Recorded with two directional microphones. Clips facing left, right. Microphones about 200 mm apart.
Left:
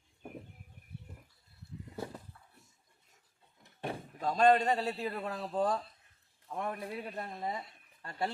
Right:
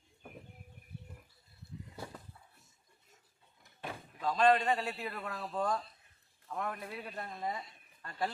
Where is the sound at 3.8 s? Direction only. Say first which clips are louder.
Left 2 dB; 40° left (ahead or behind).